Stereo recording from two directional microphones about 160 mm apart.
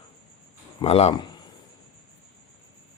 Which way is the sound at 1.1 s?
25° left (ahead or behind).